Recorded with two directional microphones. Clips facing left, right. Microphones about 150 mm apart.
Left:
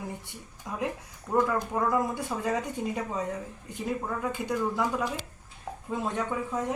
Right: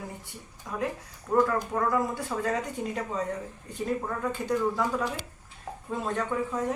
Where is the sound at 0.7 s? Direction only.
15° left (ahead or behind).